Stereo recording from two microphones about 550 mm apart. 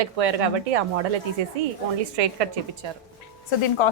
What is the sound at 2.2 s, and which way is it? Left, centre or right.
Speech, right.